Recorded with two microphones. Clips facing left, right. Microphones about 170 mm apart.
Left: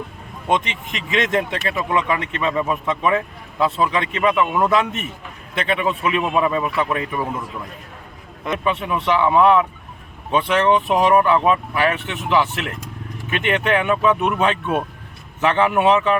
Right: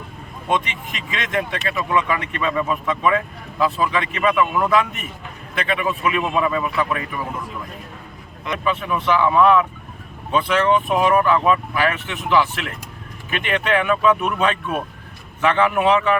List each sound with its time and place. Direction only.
0.4 s speech: 20° left (ahead or behind)
8.5 s speech: 25° left (ahead or behind)